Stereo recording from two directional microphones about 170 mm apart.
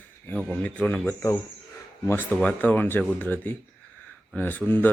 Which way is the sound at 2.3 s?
10° left (ahead or behind).